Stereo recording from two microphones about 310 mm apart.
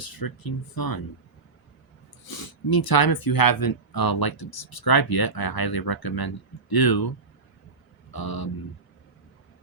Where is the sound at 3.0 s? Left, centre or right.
Left.